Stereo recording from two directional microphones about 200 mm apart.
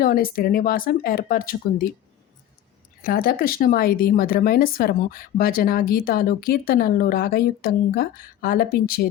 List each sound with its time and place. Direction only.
0.0 s speech: 45° left (ahead or behind)
3.0 s speech: 50° left (ahead or behind)